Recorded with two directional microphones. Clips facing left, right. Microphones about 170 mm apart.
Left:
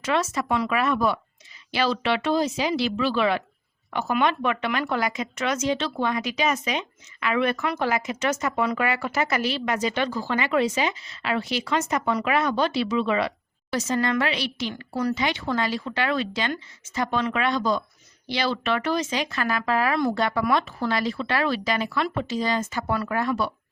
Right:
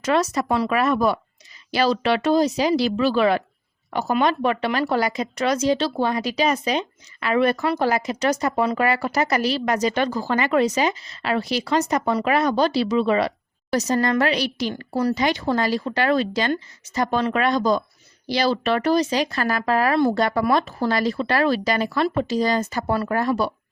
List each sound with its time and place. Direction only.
0.0 s speech: 40° right (ahead or behind)